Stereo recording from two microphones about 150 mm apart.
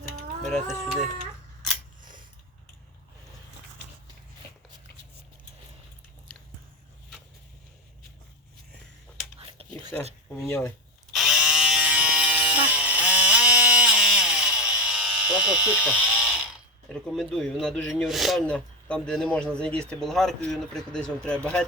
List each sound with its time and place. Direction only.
0.4 s speech: centre (ahead or behind)
9.4 s a sound: 40° right (ahead or behind)
9.9 s speech: 10° left (ahead or behind)
11.1 s electric shaver: centre (ahead or behind)
16.0 s ratchet: 5° right (ahead or behind)
16.9 s speech: centre (ahead or behind)